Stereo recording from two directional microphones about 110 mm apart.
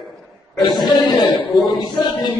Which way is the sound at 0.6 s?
Centre (ahead or behind).